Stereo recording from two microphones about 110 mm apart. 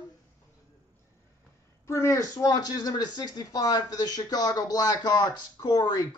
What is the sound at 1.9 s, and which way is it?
Speech, 25° left (ahead or behind).